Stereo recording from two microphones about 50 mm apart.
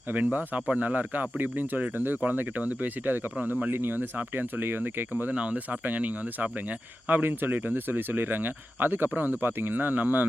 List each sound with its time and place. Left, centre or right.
0.1 s speech: right
5.3 s speech: right